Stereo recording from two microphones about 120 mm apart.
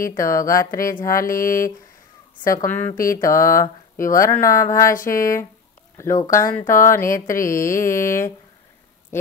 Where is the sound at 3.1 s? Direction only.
25° left (ahead or behind).